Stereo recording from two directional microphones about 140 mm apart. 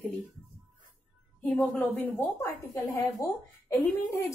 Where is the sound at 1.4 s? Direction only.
10° left (ahead or behind).